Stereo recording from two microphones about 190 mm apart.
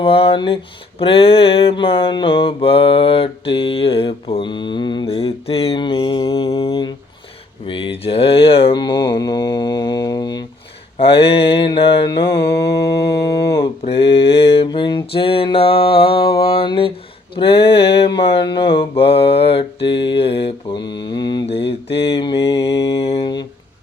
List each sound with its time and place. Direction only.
0.0 s mantra: 30° left (ahead or behind)
12.3 s mantra: 60° left (ahead or behind)
13.6 s mantra: 30° left (ahead or behind)
20.8 s mantra: 65° left (ahead or behind)
21.1 s mantra: 20° left (ahead or behind)
21.6 s mantra: 65° left (ahead or behind)
22.2 s mantra: 25° left (ahead or behind)